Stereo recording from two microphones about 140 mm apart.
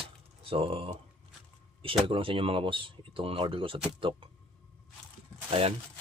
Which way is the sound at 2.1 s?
40° right (ahead or behind).